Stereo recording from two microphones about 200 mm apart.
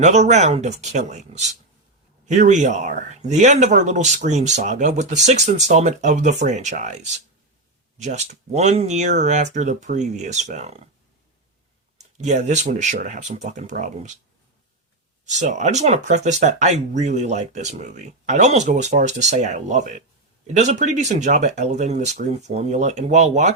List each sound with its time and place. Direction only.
0.0 s speech: 35° right (ahead or behind)
12.1 s speech: 35° right (ahead or behind)
15.3 s speech: 35° right (ahead or behind)